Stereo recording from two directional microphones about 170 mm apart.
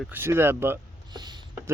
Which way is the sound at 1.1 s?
25° right (ahead or behind).